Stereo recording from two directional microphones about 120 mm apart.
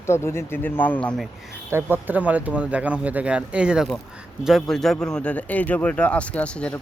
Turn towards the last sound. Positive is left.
turn(degrees=10)  # may be behind; listen again after turning